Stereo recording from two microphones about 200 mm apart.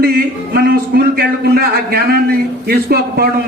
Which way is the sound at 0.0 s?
50° right (ahead or behind).